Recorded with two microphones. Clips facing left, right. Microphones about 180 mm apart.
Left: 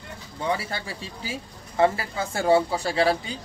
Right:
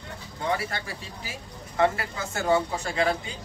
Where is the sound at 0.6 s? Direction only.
30° left (ahead or behind).